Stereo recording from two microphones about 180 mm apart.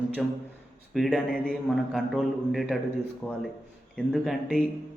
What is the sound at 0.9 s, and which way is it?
A man's voice, centre (ahead or behind).